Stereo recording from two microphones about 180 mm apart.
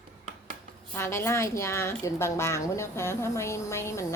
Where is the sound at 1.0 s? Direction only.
15° left (ahead or behind).